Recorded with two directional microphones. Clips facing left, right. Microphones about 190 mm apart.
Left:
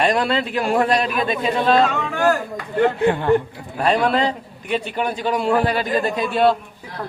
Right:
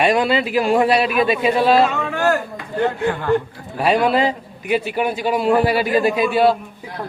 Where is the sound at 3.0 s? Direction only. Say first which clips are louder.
Left 3 dB; 25° left (ahead or behind).